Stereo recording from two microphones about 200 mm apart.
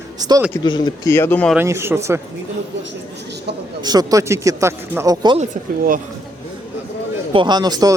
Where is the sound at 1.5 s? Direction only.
10° right (ahead or behind).